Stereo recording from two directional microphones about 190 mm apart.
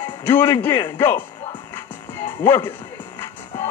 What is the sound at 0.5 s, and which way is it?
Speech, 10° left (ahead or behind).